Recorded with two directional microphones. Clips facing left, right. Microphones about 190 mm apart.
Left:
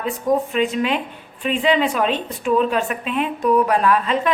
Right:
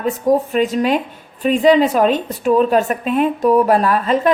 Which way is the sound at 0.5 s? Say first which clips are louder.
Right 4 dB; 40° right (ahead or behind).